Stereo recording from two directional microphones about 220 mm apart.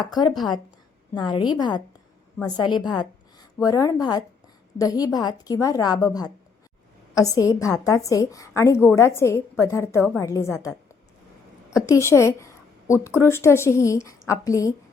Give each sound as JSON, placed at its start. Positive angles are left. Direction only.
{"t": 0.0, "sound": "a woman's voice", "side_deg": 20}
{"t": 3.0, "sound": "a sound", "side_deg": 15}
{"t": 4.8, "sound": "a woman's voice", "side_deg": 15}
{"t": 11.9, "sound": "a woman's voice", "side_deg": 15}